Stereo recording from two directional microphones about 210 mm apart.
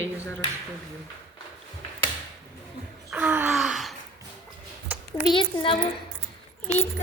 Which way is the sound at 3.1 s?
5° right (ahead or behind).